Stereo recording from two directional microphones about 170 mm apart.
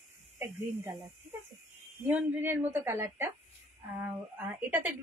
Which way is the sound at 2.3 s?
10° right (ahead or behind).